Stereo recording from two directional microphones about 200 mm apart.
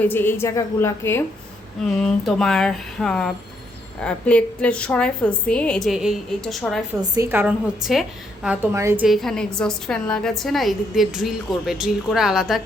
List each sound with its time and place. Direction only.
0.0 s a woman's voice: 10° left (ahead or behind)
7.0 s a woman's voice: 20° right (ahead or behind)
7.3 s a woman's voice: 10° right (ahead or behind)
8.4 s a woman's voice: 10° right (ahead or behind)
9.0 s a woman's voice: centre (ahead or behind)